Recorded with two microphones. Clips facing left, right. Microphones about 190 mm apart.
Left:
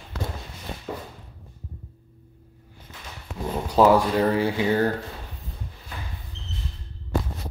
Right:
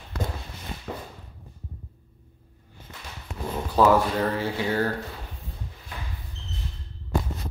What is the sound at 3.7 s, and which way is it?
Speech, 15° left (ahead or behind).